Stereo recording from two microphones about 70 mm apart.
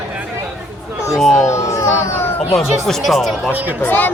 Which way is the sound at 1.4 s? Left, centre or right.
Left.